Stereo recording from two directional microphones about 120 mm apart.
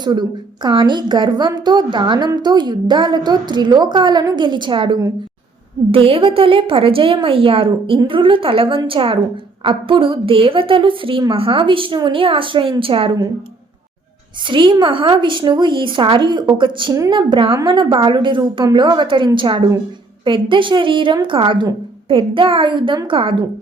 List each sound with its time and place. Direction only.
0.0 s a woman's voice: 40° right (ahead or behind)
14.4 s a woman's voice: 40° right (ahead or behind)